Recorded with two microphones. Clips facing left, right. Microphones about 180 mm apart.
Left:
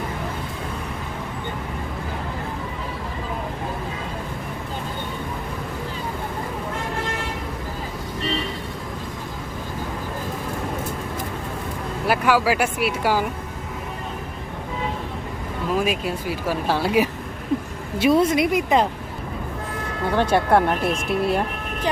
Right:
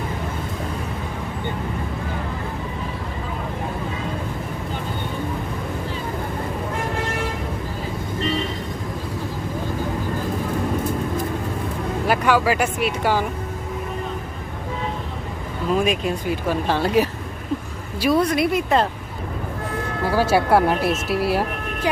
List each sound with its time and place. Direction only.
12.0 s speech: 5° left (ahead or behind)
15.8 s speech: 5° left (ahead or behind)
18.0 s speech: 25° left (ahead or behind)
20.1 s speech: 5° right (ahead or behind)